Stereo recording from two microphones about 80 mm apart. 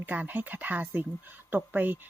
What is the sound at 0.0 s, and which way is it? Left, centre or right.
Speech, right.